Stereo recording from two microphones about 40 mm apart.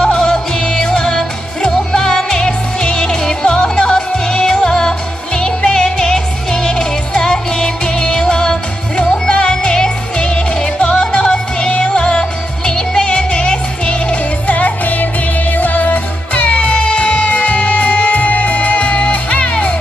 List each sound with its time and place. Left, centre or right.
0.1 s music: centre
14.5 s music: left